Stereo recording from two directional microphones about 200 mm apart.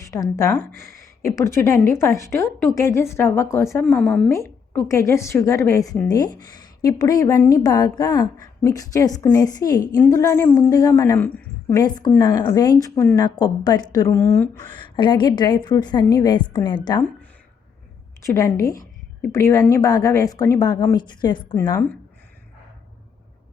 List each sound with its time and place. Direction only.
0.0 s a woman's voice: 15° left (ahead or behind)
14.7 s a woman's voice: 25° left (ahead or behind)
18.2 s a woman's voice: 15° left (ahead or behind)